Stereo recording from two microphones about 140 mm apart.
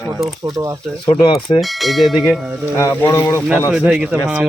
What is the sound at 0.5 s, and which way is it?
Speech, 20° right (ahead or behind).